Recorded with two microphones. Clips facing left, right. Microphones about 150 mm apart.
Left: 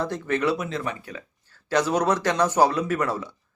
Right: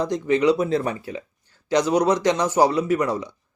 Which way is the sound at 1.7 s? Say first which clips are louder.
Right 3 dB; 15° right (ahead or behind).